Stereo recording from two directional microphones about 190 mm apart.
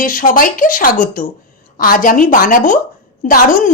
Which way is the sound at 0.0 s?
45° left (ahead or behind).